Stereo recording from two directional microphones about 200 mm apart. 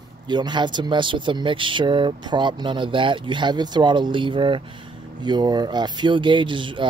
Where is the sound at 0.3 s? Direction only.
20° right (ahead or behind).